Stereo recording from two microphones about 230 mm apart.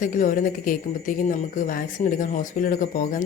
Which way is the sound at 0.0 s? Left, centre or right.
Left.